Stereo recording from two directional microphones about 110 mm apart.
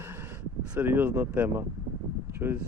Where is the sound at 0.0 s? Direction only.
20° right (ahead or behind).